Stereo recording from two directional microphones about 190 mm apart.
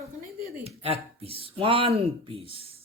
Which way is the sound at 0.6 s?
30° right (ahead or behind).